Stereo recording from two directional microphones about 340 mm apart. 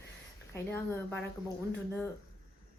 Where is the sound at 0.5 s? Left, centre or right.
Centre.